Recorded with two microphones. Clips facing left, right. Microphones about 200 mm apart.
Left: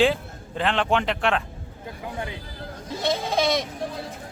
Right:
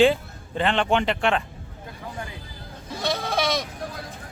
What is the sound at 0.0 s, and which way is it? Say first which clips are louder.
Speech: right 3 dB; centre (ahead or behind).